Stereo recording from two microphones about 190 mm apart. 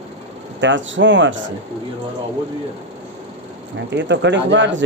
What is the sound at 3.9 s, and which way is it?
Speech, 70° right (ahead or behind).